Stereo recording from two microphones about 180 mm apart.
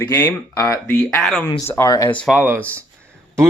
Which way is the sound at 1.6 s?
15° left (ahead or behind).